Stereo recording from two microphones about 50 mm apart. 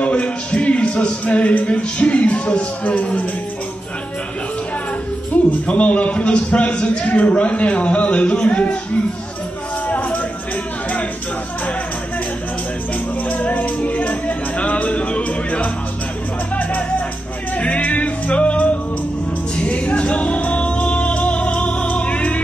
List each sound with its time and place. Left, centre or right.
0.0 s a sound: left
2.8 s speech: left
5.7 s a man's voice: left
9.8 s music: left
13.3 s music: left
17.6 s music: left